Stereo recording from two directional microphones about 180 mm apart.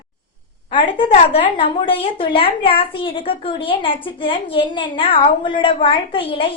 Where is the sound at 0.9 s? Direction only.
30° left (ahead or behind).